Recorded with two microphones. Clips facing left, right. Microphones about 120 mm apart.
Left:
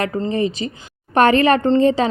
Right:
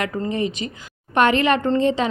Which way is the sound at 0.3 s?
35° left (ahead or behind).